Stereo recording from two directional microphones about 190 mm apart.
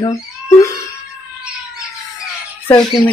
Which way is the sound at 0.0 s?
15° left (ahead or behind).